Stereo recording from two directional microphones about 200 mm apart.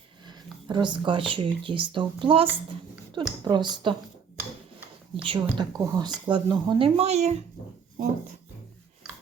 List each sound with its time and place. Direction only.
0.3 s speech: 20° right (ahead or behind)
5.1 s speech: 25° right (ahead or behind)